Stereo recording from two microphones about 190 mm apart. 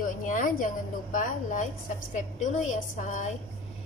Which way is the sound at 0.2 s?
45° left (ahead or behind).